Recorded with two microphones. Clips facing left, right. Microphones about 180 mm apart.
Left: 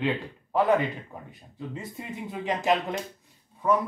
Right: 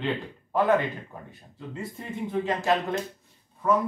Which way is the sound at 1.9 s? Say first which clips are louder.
Right 5 dB; 15° left (ahead or behind).